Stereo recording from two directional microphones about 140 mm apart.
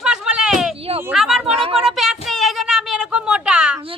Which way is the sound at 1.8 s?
Centre (ahead or behind).